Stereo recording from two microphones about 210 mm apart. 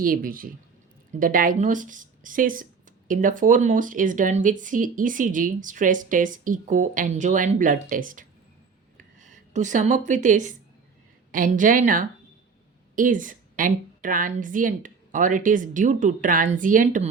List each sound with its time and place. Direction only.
0.0 s speech: 40° right (ahead or behind)